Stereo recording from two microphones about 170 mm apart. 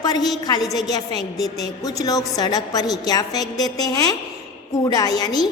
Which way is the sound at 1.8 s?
20° left (ahead or behind).